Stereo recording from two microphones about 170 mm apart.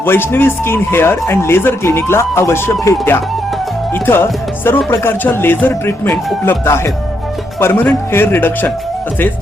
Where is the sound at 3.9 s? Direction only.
10° left (ahead or behind).